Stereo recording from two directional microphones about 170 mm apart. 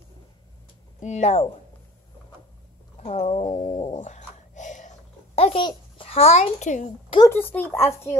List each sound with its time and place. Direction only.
1.0 s speech: 40° left (ahead or behind)
3.0 s a sound: 40° left (ahead or behind)
7.2 s speech: 10° left (ahead or behind)